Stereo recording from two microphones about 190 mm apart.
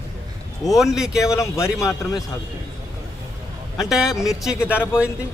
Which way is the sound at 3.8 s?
Centre (ahead or behind).